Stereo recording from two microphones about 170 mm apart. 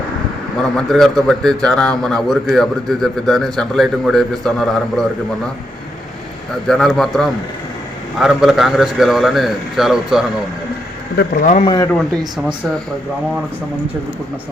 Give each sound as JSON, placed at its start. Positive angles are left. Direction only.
{"t": 0.8, "sound": "a man's voice", "side_deg": 0}
{"t": 6.7, "sound": "a man's voice", "side_deg": 0}
{"t": 11.2, "sound": "speech", "side_deg": 70}
{"t": 11.6, "sound": "speech", "side_deg": 25}
{"t": 11.9, "sound": "a man's voice", "side_deg": 5}